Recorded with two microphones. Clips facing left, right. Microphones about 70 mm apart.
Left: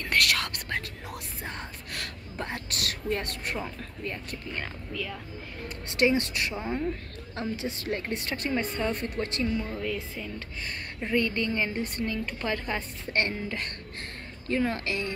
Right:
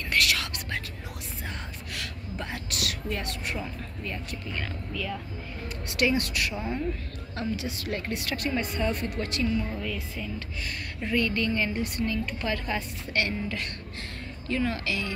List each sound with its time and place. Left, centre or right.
0.1 s whispering: left
1.4 s a sound: left
5.9 s a woman's voice: left